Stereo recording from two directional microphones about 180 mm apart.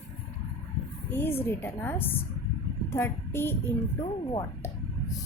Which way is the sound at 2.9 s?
10° left (ahead or behind).